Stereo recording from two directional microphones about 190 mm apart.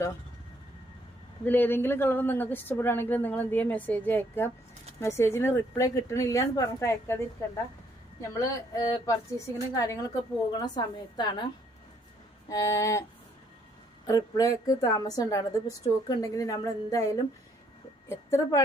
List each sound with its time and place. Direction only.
1.5 s a woman's voice: 10° left (ahead or behind)
12.5 s a woman's voice: 15° left (ahead or behind)
14.1 s a woman's voice: 20° left (ahead or behind)